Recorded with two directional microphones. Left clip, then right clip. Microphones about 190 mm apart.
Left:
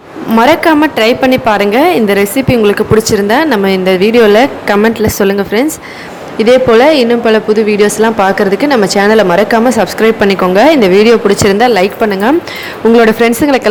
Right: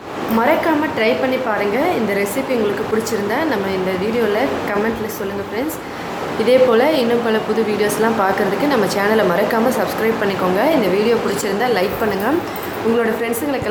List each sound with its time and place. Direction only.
0.3 s a woman's voice: 45° left (ahead or behind)
6.4 s a woman's voice: 40° left (ahead or behind)